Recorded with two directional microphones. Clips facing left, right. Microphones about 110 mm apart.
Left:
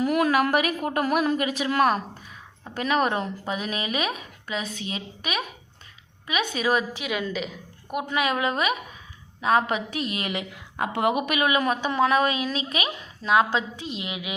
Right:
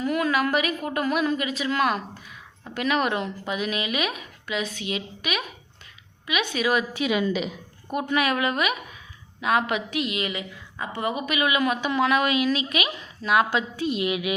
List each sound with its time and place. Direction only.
0.0 s a woman's voice: 45° left (ahead or behind)
7.0 s a woman's voice: 5° right (ahead or behind)
7.9 s a woman's voice: 15° left (ahead or behind); by 10.2 s 35° left (ahead or behind)
10.2 s a woman's voice: 60° left (ahead or behind)
11.3 s a woman's voice: 40° left (ahead or behind); by 14.3 s 25° left (ahead or behind)